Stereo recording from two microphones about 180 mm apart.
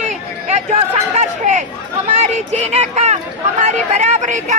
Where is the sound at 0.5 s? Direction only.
40° right (ahead or behind).